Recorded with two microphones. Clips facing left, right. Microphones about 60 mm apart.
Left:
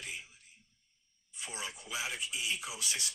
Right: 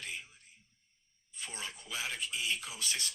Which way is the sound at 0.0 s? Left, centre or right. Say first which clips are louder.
Right 1 dB; centre.